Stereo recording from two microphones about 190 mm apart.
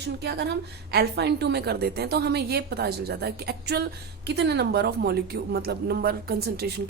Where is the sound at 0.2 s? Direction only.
60° right (ahead or behind).